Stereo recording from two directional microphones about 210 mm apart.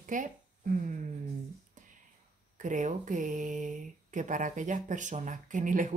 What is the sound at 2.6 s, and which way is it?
Speech, 35° right (ahead or behind).